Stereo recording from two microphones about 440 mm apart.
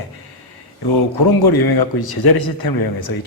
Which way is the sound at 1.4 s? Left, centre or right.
Left.